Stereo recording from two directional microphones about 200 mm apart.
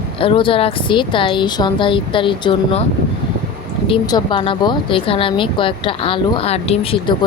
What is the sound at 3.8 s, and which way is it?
Speech, 25° left (ahead or behind).